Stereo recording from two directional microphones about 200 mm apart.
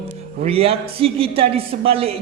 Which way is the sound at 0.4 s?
30° right (ahead or behind).